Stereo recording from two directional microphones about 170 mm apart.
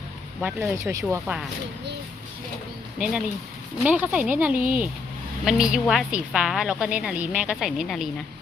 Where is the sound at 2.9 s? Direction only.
5° right (ahead or behind).